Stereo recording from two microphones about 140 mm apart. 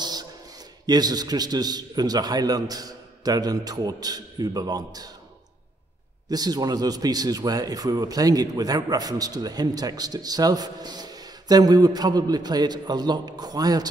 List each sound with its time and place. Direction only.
0.0 s a sound: 30° right (ahead or behind)
0.8 s a man's voice: 30° right (ahead or behind)
6.2 s a man's voice: 30° right (ahead or behind)